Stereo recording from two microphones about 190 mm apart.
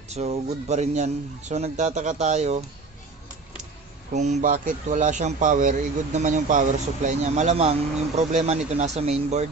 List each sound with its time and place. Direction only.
0.1 s a man's voice: 35° right (ahead or behind)
4.1 s a man's voice: 35° right (ahead or behind)